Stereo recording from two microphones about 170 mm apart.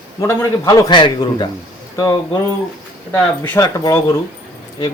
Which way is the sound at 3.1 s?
10° left (ahead or behind).